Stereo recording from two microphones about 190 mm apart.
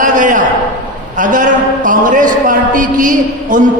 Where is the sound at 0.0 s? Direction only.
45° right (ahead or behind).